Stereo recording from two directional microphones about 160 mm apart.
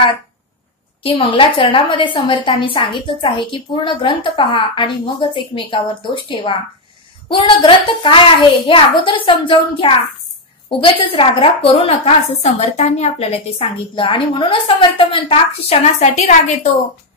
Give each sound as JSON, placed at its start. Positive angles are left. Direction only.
{"t": 1.0, "sound": "a woman's voice", "side_deg": 35}